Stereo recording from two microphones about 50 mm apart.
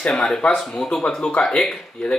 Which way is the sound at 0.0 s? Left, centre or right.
Centre.